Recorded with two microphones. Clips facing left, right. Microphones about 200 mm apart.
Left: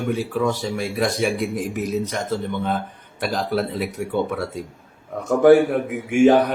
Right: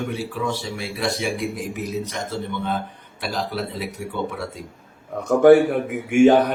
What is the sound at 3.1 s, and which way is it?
Speech, 50° left (ahead or behind).